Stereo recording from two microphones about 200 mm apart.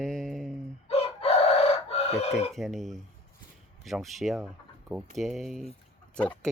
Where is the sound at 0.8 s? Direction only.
30° left (ahead or behind).